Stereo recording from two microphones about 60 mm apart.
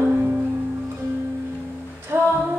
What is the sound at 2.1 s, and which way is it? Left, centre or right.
Music, right.